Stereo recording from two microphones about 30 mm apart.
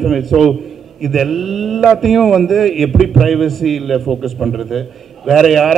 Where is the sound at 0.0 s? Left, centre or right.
Centre.